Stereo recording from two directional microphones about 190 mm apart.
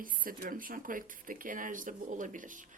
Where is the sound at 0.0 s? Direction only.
45° right (ahead or behind).